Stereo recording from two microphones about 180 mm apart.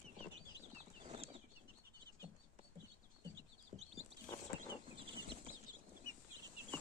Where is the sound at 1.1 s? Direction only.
35° right (ahead or behind).